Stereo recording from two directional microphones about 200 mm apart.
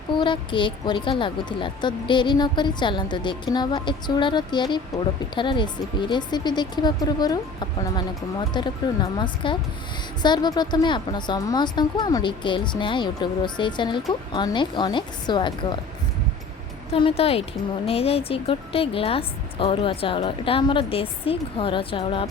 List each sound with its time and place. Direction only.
0.1 s a woman's voice: 25° left (ahead or behind)
16.9 s a woman's voice: 30° left (ahead or behind)